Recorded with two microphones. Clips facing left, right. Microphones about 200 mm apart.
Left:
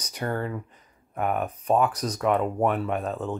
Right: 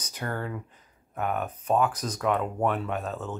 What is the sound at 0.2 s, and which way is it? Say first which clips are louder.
Speech: left 4 dB; 5° left (ahead or behind).